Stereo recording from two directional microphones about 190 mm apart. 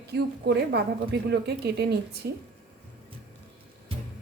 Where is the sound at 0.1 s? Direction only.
60° right (ahead or behind).